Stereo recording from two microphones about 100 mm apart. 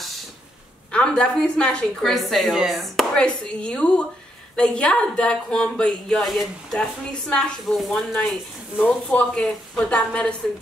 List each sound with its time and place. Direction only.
0.9 s speech: 10° left (ahead or behind)